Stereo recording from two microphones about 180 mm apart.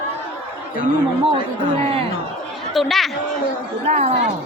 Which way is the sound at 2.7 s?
Centre (ahead or behind).